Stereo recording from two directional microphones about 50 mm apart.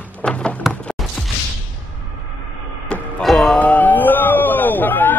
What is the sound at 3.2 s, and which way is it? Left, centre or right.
Music, centre.